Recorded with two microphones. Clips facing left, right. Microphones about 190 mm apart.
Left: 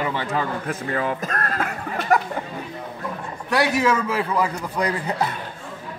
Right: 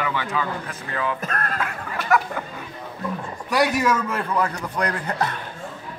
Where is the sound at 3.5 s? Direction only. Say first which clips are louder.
Left 1 dB; centre (ahead or behind).